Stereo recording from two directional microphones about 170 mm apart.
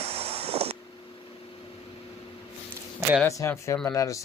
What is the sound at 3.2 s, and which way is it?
Speech, 15° left (ahead or behind).